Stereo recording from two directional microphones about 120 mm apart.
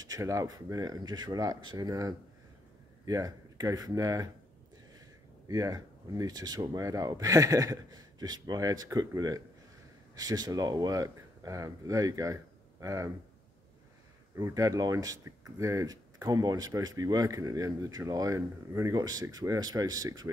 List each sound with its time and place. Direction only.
0.0 s speech: 30° right (ahead or behind)
5.5 s speech: 30° right (ahead or behind)
14.3 s speech: 25° right (ahead or behind)